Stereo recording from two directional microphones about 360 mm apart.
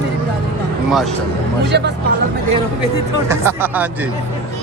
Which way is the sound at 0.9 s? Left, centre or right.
Centre.